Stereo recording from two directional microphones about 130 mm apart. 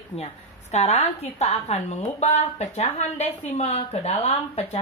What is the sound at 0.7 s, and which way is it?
A woman's voice, 55° left (ahead or behind).